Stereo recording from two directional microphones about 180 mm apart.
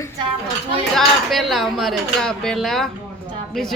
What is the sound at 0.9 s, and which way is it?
A woman's voice, centre (ahead or behind).